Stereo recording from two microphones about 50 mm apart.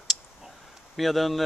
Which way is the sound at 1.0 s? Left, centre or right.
Centre.